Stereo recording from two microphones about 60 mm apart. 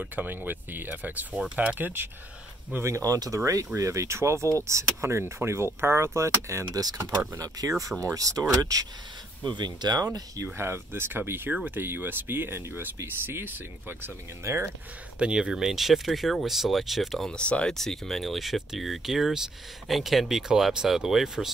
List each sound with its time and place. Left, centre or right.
0.1 s speech: right
2.8 s speech: right
6.7 s speech: right
8.0 s speech: right
10.4 s speech: right
14.4 s speech: right
15.1 s speech: centre
17.3 s speech: centre
17.7 s speech: centre